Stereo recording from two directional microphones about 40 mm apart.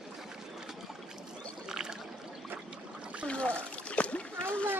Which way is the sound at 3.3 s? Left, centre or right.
Left.